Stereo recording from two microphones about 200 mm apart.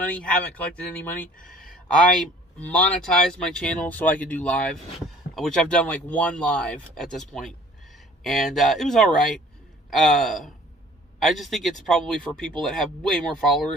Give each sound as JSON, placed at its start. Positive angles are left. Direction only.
{"t": 0.0, "sound": "speech", "side_deg": 5}
{"t": 1.4, "sound": "speech", "side_deg": 45}
{"t": 1.6, "sound": "a man's voice", "side_deg": 5}